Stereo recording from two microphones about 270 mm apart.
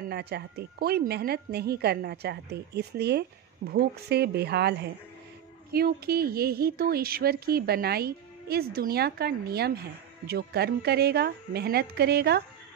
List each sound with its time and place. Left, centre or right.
0.1 s a woman's voice: right